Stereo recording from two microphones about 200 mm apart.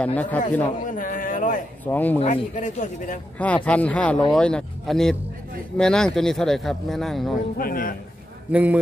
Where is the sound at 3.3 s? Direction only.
5° left (ahead or behind).